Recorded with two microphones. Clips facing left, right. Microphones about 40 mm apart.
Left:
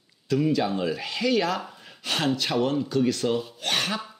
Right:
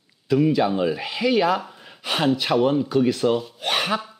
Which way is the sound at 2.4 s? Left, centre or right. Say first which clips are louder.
Right 5 dB; centre.